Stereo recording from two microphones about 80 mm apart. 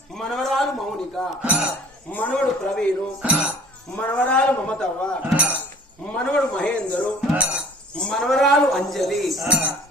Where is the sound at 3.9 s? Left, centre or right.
Centre.